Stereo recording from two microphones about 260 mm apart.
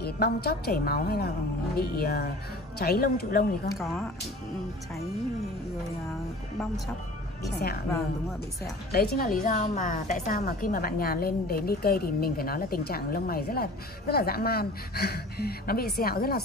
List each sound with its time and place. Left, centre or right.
0.0 s a woman's voice: left
3.7 s speech: centre
8.9 s a woman's voice: left